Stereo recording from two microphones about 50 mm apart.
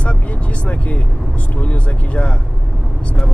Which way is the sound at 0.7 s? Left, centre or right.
Left.